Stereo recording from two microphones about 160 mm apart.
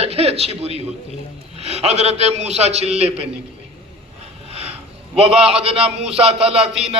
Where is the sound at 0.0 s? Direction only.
40° right (ahead or behind).